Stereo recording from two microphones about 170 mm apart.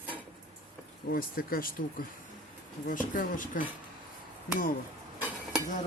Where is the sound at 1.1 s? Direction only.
60° left (ahead or behind).